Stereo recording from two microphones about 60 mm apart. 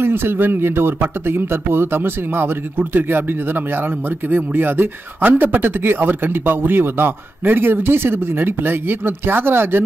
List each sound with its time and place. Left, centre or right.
0.0 s speech: right
4.3 s speech: right